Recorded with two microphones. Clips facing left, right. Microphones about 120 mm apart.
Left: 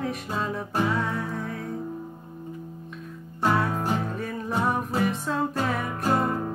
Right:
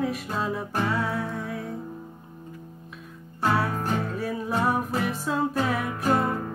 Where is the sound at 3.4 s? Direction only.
Centre (ahead or behind).